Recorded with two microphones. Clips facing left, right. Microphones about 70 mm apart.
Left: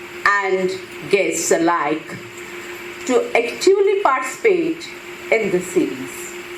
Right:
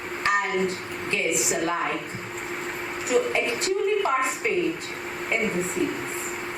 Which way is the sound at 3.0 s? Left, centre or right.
Left.